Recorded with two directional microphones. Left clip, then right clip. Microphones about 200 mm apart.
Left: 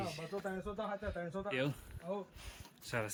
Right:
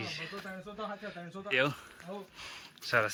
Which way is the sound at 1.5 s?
5° left (ahead or behind).